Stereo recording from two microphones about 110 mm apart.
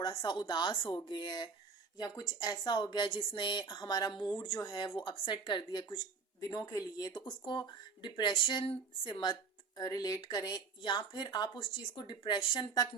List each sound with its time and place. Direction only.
0.0 s speech: 40° left (ahead or behind)
6.5 s speech: 30° left (ahead or behind)